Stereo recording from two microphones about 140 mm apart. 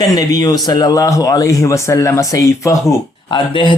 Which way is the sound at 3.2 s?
35° left (ahead or behind).